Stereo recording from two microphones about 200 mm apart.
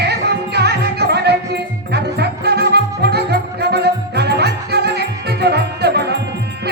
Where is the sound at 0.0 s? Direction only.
55° right (ahead or behind).